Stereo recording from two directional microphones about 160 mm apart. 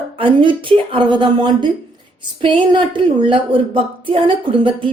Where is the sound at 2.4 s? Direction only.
30° right (ahead or behind).